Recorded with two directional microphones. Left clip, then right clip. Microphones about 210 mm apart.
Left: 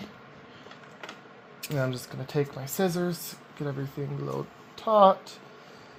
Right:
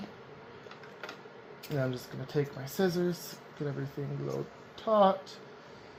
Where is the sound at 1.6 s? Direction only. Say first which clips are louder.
Left 4 dB; 50° left (ahead or behind).